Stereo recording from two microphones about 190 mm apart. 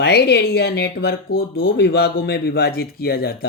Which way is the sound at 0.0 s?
60° left (ahead or behind).